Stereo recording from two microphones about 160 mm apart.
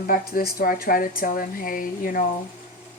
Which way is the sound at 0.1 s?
65° left (ahead or behind).